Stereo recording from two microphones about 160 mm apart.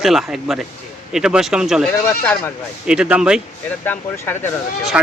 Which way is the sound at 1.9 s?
10° left (ahead or behind).